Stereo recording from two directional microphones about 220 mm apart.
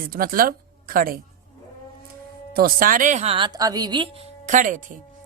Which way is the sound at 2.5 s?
40° right (ahead or behind).